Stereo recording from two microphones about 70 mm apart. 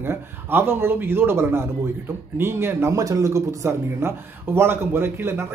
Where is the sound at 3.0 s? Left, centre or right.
Right.